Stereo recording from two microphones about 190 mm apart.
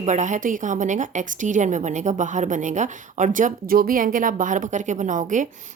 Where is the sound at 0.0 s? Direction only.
40° right (ahead or behind).